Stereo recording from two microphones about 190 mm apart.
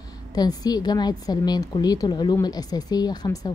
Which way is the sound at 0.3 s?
20° left (ahead or behind).